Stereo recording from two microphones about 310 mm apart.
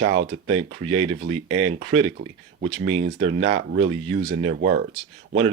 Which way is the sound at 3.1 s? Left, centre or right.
Right.